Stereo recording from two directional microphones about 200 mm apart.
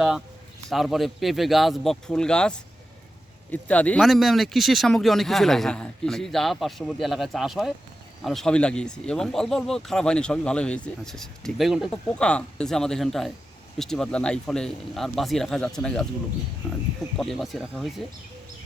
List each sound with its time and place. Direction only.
0.7 s speech: centre (ahead or behind)
17.2 s speech: centre (ahead or behind)